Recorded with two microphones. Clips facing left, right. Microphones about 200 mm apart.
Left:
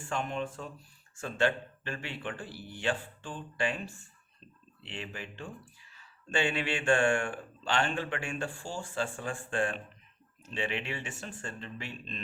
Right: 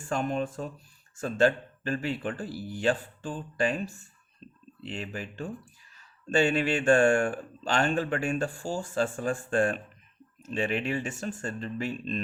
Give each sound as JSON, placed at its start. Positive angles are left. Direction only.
{"t": 0.0, "sound": "speech", "side_deg": -40}